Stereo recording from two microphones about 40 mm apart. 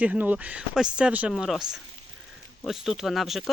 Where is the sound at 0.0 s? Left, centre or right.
Right.